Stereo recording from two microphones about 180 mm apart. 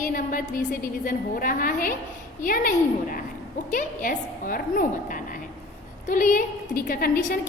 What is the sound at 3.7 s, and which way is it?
A woman's voice, 50° left (ahead or behind).